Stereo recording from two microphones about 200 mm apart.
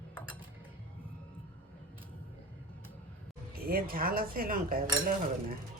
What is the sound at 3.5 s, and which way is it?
Dishes, 45° right (ahead or behind).